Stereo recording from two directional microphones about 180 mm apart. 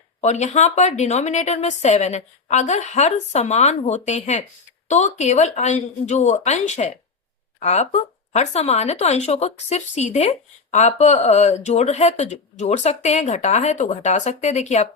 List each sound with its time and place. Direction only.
0.2 s speech: 40° left (ahead or behind)